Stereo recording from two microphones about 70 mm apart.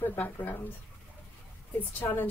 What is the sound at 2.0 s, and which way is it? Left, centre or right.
Speech, left.